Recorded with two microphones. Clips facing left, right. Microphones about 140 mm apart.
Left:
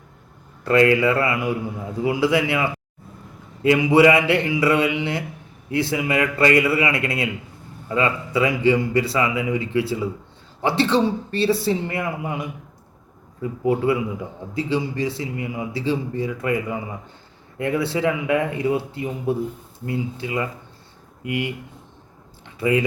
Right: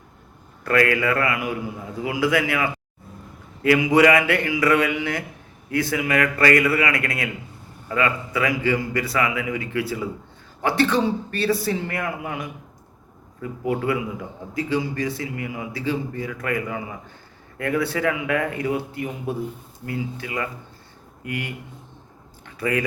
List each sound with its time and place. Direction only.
0.6 s a man's voice: 25° left (ahead or behind)
22.6 s a man's voice: 20° left (ahead or behind)